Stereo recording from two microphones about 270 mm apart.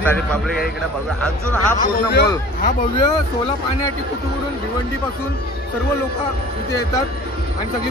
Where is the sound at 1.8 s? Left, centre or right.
Left.